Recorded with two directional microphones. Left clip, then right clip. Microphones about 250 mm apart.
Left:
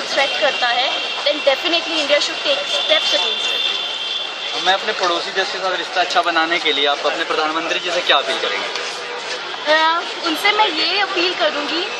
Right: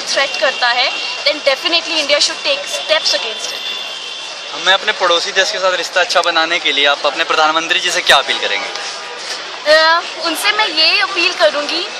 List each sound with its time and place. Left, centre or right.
0.1 s speech: centre
4.6 s speech: right
9.7 s speech: centre